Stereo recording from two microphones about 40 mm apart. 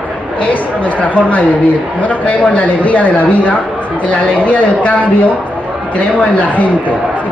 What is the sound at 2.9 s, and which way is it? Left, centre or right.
Speech, left.